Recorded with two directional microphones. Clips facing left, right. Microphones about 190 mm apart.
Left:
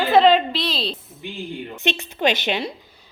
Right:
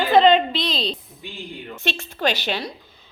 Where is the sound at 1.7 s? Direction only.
20° left (ahead or behind).